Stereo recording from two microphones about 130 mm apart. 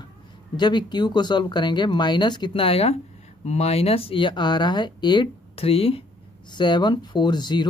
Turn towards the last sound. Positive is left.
turn(degrees=35)  # may be behind; listen again after turning